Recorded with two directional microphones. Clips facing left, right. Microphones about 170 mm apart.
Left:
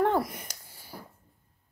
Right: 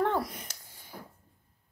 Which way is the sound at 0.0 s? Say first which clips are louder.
Left 3 dB; 10° left (ahead or behind).